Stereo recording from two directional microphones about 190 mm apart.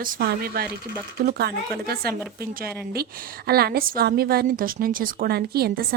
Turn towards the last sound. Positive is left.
turn(degrees=-55)  # may be behind; listen again after turning